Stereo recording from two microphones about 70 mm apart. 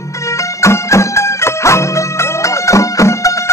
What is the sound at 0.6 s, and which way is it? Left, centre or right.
Music, left.